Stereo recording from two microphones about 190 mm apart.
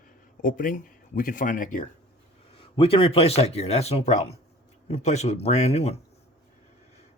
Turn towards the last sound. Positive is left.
turn(degrees=35)  # may be behind; listen again after turning